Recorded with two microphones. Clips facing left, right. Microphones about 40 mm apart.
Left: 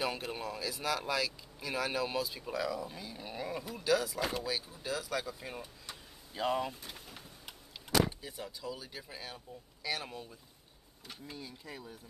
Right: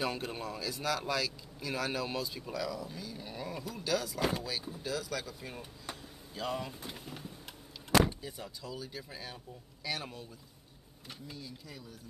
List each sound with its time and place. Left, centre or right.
0.0 s speech: centre
6.3 s speech: left
6.9 s speech: centre
8.1 s speech: centre
11.2 s speech: left